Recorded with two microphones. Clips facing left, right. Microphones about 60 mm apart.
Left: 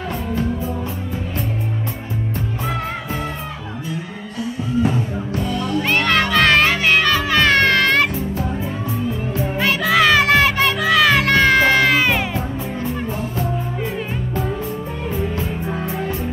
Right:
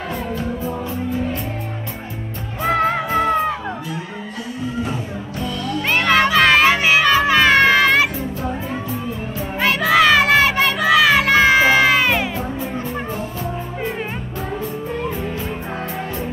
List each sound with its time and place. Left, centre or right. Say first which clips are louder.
2.6 s music: right 12 dB; right
5.8 s music: right 2 dB; centre
9.6 s music: right 2 dB; centre